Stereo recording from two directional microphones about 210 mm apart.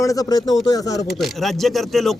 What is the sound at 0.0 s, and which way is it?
Speech, 15° left (ahead or behind).